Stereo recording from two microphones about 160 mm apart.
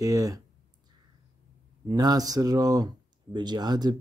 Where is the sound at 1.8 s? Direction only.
25° right (ahead or behind).